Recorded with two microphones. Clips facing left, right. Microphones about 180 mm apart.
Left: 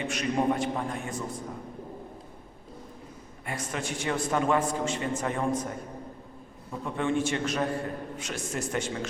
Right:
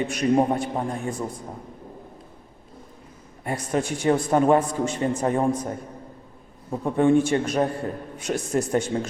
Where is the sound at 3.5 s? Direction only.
35° right (ahead or behind).